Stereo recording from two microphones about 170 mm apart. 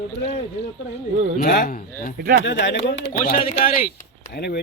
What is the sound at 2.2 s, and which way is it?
Speech, 60° right (ahead or behind).